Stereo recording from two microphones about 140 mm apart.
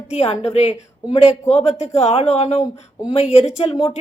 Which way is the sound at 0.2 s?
45° left (ahead or behind).